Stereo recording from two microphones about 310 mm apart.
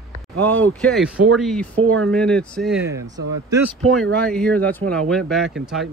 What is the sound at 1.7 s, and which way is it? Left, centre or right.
Speech, right.